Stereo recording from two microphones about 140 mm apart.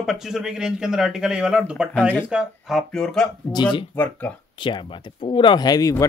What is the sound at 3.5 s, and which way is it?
Speech, 35° left (ahead or behind).